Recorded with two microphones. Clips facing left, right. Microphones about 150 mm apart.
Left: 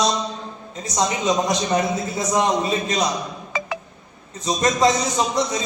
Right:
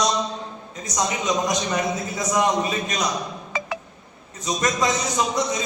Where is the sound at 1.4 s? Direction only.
30° left (ahead or behind).